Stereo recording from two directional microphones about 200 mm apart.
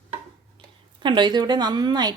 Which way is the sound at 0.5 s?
25° right (ahead or behind).